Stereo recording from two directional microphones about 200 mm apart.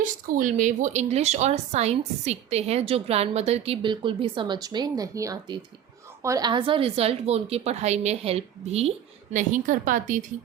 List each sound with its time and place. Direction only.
0.0 s a woman's voice: 40° right (ahead or behind)